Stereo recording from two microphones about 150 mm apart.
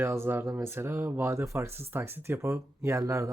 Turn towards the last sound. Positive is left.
turn(degrees=-20)  # may be behind; listen again after turning